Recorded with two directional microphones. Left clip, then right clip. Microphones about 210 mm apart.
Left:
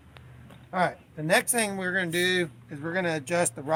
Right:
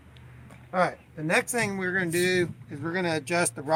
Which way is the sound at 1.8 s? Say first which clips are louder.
Even; 25° left (ahead or behind).